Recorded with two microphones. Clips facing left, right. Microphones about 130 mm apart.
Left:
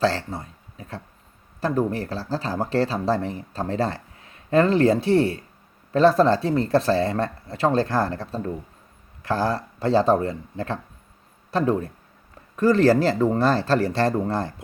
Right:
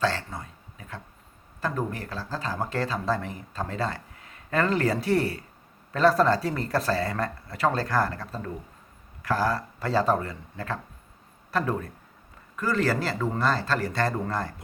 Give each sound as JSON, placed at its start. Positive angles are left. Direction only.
{"t": 0.0, "sound": "speech", "side_deg": 35}